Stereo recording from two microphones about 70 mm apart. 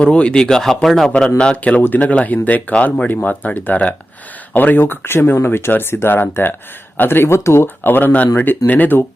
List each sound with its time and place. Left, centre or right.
0.0 s speech: centre
1.4 s speech: centre